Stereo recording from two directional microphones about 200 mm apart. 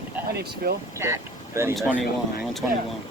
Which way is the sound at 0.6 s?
50° right (ahead or behind).